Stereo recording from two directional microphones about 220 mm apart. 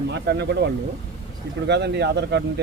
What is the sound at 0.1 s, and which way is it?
Speech, 50° right (ahead or behind).